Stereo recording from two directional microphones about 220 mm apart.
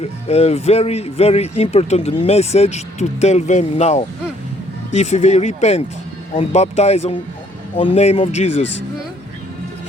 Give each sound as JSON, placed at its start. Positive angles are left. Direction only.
{"t": 0.0, "sound": "speech", "side_deg": 30}